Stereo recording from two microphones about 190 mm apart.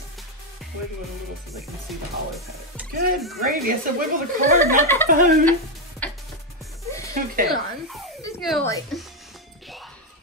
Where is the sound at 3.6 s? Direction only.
50° right (ahead or behind).